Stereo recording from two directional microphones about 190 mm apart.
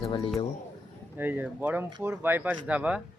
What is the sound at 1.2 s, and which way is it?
Speech, 10° right (ahead or behind).